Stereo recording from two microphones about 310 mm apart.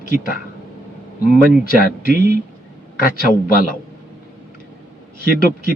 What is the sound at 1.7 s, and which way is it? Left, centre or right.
Speech, left.